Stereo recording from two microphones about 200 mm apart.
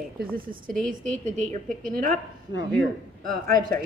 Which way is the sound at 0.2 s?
45° right (ahead or behind).